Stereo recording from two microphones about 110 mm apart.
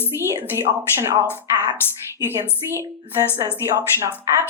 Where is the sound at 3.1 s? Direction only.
25° right (ahead or behind).